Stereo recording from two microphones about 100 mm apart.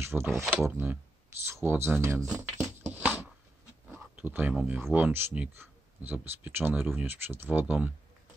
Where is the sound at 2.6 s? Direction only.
20° right (ahead or behind).